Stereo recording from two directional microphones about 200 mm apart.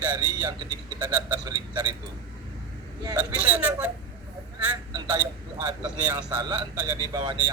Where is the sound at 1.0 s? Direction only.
10° right (ahead or behind).